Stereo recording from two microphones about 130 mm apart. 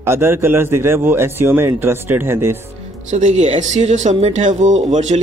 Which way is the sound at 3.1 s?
60° right (ahead or behind).